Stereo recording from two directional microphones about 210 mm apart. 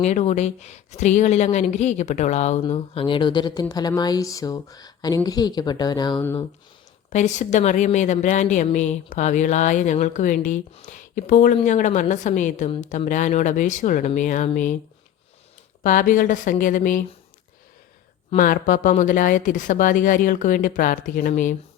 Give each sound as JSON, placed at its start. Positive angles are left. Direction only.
{"t": 0.0, "sound": "speech", "side_deg": 35}
{"t": 7.1, "sound": "a woman's voice", "side_deg": 35}
{"t": 15.8, "sound": "a woman's voice", "side_deg": 40}
{"t": 18.3, "sound": "a woman's voice", "side_deg": 40}